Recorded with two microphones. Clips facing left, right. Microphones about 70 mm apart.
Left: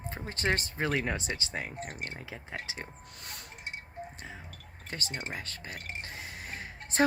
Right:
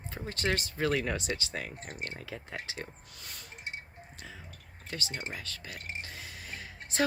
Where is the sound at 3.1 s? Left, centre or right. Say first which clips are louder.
Left 2 dB; left.